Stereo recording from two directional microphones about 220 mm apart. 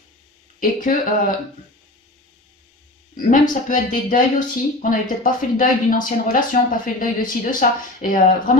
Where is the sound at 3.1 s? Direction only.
35° left (ahead or behind).